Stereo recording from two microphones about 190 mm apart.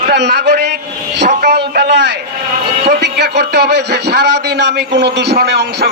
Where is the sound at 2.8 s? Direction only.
60° right (ahead or behind).